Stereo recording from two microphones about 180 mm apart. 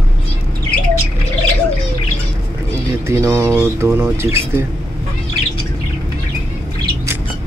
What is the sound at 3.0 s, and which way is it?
Speech, 15° right (ahead or behind).